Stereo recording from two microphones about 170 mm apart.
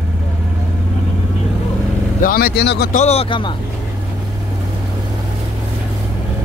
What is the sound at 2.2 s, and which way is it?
Speech, 60° left (ahead or behind).